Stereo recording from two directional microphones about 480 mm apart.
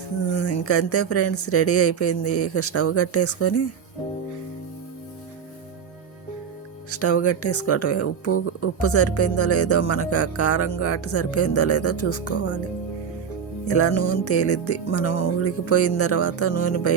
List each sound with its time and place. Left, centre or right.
0.3 s speech: left
6.9 s speech: left
13.7 s speech: left